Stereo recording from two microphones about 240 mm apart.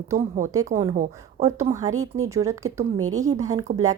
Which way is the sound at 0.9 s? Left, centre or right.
Right.